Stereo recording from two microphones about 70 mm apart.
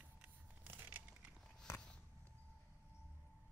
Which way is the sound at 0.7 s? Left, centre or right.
Right.